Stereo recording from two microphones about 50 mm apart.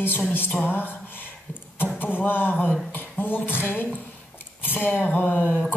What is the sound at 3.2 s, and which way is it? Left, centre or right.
A woman's voice, left.